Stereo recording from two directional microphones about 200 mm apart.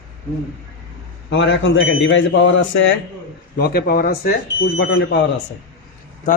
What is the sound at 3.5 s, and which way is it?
Speech, 50° left (ahead or behind).